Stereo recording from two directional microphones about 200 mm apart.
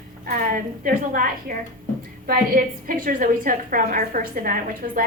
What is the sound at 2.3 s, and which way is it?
A woman's voice, 45° right (ahead or behind).